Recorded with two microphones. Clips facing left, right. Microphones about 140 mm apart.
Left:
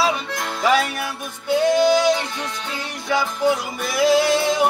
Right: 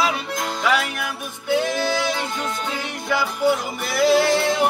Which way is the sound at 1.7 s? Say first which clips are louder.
Left 7 dB; 20° left (ahead or behind).